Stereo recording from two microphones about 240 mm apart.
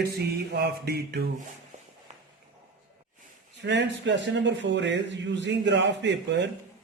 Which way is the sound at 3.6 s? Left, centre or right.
Right.